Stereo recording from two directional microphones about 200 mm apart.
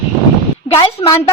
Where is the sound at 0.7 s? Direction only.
20° left (ahead or behind).